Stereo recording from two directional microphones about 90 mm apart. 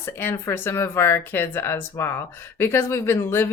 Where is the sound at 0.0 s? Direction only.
25° left (ahead or behind).